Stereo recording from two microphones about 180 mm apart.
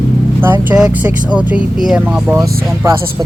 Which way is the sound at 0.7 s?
5° right (ahead or behind).